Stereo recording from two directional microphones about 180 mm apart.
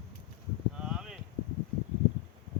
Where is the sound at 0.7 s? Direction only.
5° right (ahead or behind).